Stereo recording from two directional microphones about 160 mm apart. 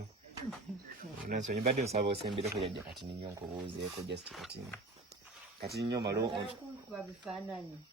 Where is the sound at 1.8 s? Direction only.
40° right (ahead or behind).